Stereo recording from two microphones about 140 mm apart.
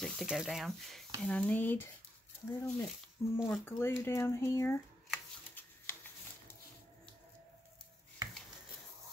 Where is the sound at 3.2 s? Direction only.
20° left (ahead or behind).